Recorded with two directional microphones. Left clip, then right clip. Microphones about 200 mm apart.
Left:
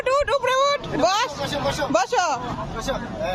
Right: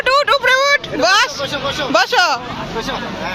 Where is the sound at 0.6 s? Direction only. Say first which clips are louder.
Right 6 dB; 30° right (ahead or behind).